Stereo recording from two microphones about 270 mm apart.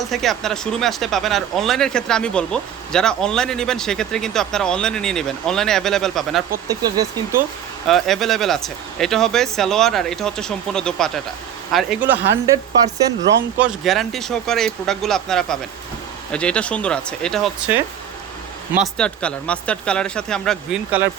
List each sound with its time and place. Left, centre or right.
0.0 s speech: centre
6.7 s speech: centre
7.9 s speech: centre
13.6 s speech: centre